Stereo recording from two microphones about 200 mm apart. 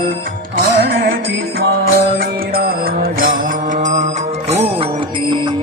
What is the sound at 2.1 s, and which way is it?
Music, 45° right (ahead or behind).